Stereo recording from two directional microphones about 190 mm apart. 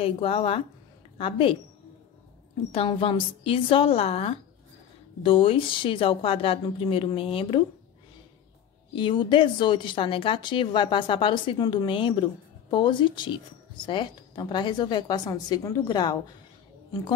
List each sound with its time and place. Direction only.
0.0 s a woman's voice: 30° left (ahead or behind)
2.7 s a woman's voice: 30° left (ahead or behind)
8.9 s a woman's voice: 25° left (ahead or behind)